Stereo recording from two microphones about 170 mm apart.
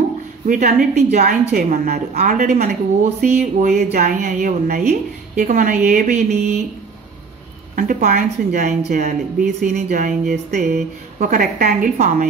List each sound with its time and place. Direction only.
0.5 s a woman's voice: 50° right (ahead or behind)
1.5 s a woman's voice: 60° right (ahead or behind); by 3.4 s 40° right (ahead or behind)
3.6 s a woman's voice: 60° right (ahead or behind); by 6.6 s 45° right (ahead or behind)
7.7 s a woman's voice: 55° right (ahead or behind)
8.5 s a woman's voice: 45° right (ahead or behind)